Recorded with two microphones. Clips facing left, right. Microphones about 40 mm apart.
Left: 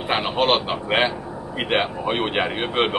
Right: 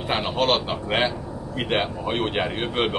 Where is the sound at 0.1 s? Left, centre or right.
Centre.